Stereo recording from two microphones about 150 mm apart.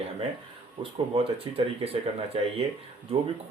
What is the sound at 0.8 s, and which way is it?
Speech, 40° right (ahead or behind).